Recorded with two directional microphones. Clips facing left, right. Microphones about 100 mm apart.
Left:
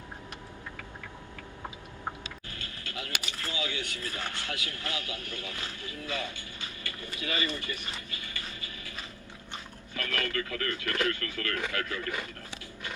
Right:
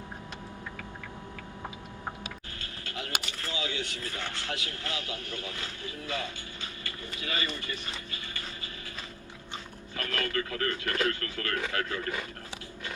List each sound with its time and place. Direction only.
2.9 s speech: 30° right (ahead or behind)
10.0 s speech: 25° right (ahead or behind)